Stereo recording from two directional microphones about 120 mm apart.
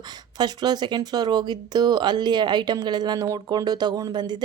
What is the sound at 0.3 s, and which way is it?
Speech, 35° right (ahead or behind).